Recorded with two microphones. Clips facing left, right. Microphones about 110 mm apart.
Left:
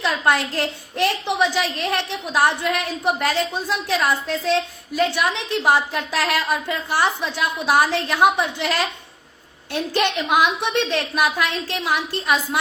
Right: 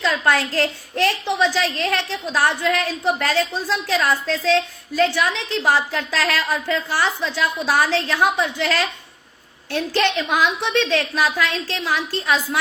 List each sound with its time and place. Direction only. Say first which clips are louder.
0.0 s a woman's voice: right 1 dB; 20° left (ahead or behind)